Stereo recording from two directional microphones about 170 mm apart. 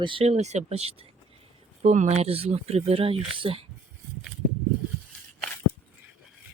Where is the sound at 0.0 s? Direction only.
30° right (ahead or behind).